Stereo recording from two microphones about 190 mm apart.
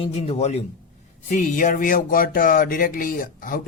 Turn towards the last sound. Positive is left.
turn(degrees=45)  # may be behind; listen again after turning